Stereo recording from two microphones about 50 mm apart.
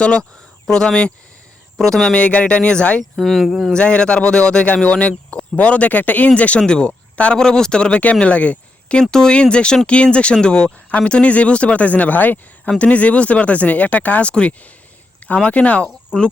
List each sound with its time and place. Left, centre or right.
0.7 s speech: centre
2.1 s speech: left
3.0 s speech: centre
3.7 s speech: left
7.3 s speech: centre